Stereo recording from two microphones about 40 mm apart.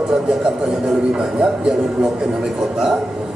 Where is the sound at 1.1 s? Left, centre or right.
Right.